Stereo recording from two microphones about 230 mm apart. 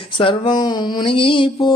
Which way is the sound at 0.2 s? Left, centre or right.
Left.